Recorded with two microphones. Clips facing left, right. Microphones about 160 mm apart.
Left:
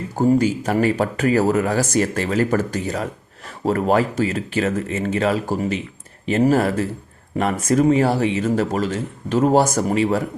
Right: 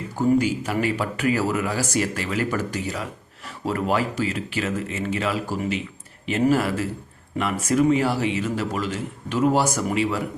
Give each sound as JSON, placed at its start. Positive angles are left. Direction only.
{"t": 0.3, "sound": "a man's voice", "side_deg": 40}